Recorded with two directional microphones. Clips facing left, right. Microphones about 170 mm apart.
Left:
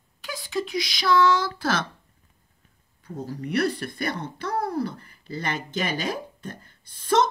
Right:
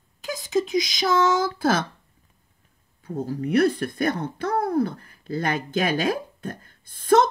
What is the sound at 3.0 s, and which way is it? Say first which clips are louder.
Speech: right 5 dB; 50° right (ahead or behind).